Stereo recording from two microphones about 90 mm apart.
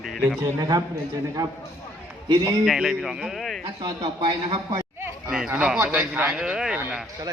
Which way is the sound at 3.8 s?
60° right (ahead or behind).